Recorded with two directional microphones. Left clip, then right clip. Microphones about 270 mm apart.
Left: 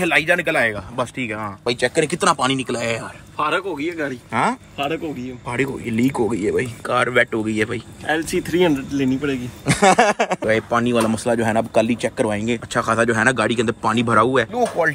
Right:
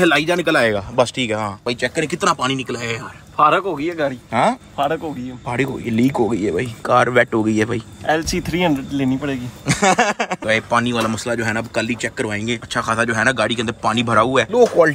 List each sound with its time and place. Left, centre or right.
0.1 s speech: centre
3.3 s speech: right
4.3 s speech: centre
8.1 s speech: right
9.2 s speech: centre